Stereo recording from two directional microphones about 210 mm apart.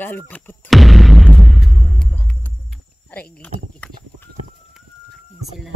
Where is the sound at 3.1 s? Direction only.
5° left (ahead or behind).